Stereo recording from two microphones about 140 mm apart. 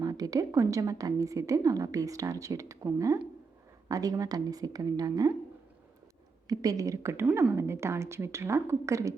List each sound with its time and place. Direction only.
0.0 s a woman's voice: 25° right (ahead or behind)
6.5 s a woman's voice: 25° right (ahead or behind)